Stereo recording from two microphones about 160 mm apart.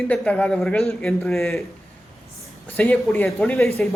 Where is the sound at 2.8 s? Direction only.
10° left (ahead or behind).